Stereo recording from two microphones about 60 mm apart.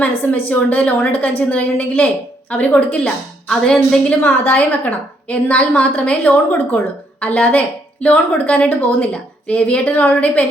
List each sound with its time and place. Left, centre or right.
0.0 s a woman's voice: left
3.5 s a woman's voice: centre
4.2 s a woman's voice: left